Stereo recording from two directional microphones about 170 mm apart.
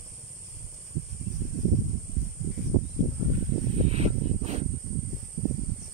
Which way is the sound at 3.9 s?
40° right (ahead or behind).